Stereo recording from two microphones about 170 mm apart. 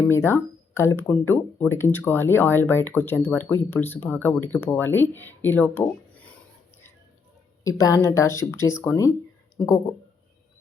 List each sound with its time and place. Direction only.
0.1 s speech: 15° left (ahead or behind)
7.6 s a woman's voice: 20° left (ahead or behind)